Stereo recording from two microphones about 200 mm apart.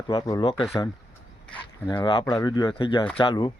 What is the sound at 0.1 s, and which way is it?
Speech, 20° left (ahead or behind).